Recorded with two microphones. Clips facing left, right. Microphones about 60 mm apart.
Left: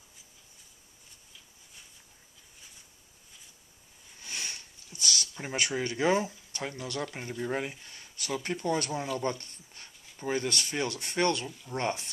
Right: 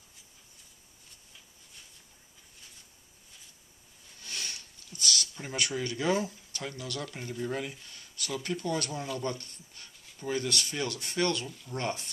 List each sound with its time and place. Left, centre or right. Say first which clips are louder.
4.2 s sniff: left 1 dB; centre
4.9 s speech: right 1 dB; left